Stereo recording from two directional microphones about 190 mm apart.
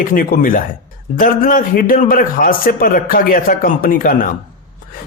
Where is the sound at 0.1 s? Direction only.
45° left (ahead or behind).